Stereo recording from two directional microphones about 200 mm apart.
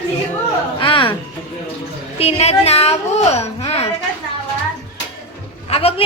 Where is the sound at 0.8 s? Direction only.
25° left (ahead or behind).